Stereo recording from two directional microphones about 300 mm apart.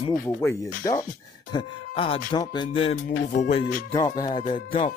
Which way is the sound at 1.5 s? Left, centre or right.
Centre.